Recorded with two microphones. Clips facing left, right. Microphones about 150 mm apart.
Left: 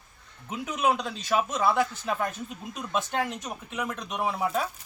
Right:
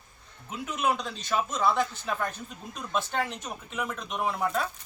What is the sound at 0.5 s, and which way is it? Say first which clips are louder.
Speech: left 2 dB; 15° left (ahead or behind).